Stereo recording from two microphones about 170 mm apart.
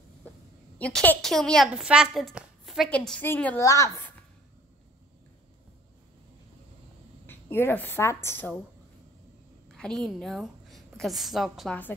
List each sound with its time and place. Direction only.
0.7 s a woman's voice: 5° left (ahead or behind)
7.2 s a woman's voice: 15° left (ahead or behind)
9.7 s a woman's voice: 5° left (ahead or behind)